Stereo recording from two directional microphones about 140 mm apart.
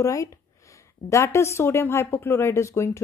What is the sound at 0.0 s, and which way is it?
A woman's voice, 25° left (ahead or behind).